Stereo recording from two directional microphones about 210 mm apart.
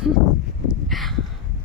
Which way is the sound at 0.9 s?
Centre (ahead or behind).